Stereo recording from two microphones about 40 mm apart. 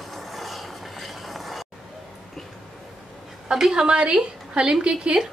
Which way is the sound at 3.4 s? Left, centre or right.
Centre.